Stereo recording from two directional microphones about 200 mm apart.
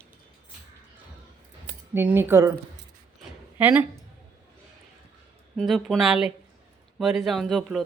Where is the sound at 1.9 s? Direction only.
10° right (ahead or behind).